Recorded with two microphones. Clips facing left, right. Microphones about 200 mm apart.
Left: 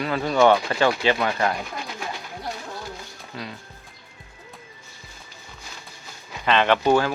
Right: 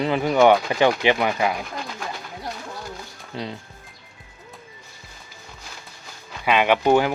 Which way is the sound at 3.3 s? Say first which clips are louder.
Right 5 dB; 25° right (ahead or behind).